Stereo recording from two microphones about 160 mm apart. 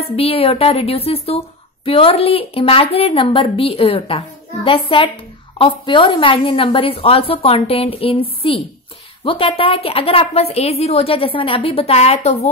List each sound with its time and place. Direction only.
0.0 s a woman's voice: 40° left (ahead or behind)